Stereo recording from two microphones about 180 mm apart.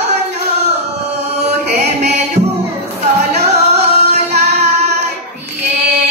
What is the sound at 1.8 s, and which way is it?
Music, 40° right (ahead or behind).